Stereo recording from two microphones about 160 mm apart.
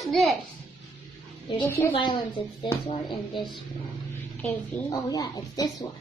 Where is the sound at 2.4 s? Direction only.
35° left (ahead or behind).